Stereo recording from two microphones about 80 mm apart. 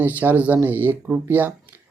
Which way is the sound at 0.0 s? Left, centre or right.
Right.